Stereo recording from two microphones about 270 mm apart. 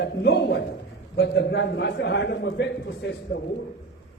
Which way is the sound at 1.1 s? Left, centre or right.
Left.